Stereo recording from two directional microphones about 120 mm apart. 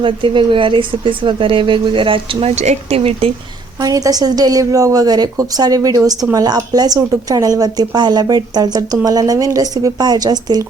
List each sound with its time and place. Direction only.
0.0 s speech: 45° right (ahead or behind)
2.6 s speech: 65° right (ahead or behind)
3.8 s a woman's voice: 30° right (ahead or behind)